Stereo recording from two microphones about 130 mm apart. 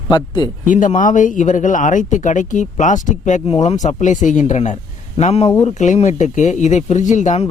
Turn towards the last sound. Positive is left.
turn(degrees=70)  # may be behind; listen again after turning